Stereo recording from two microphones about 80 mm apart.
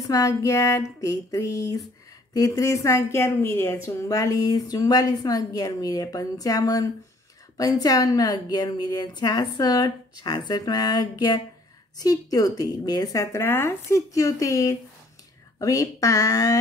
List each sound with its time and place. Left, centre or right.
0.0 s a woman's voice: left
4.1 s a woman's voice: left